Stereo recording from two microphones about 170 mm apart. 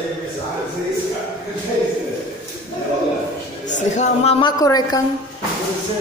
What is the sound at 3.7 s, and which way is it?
Speech, 45° left (ahead or behind).